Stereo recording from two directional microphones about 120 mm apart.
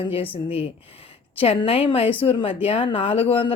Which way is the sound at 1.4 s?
50° left (ahead or behind).